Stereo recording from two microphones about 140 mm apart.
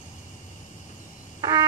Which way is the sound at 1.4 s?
25° right (ahead or behind).